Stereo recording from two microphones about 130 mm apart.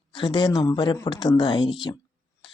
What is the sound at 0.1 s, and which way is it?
Speech, 35° left (ahead or behind).